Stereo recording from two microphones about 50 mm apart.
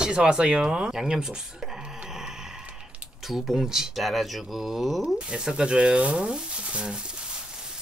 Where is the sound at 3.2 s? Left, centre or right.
Centre.